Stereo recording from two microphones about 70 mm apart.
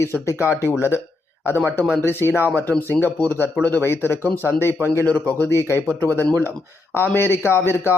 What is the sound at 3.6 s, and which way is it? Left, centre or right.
Speech, left.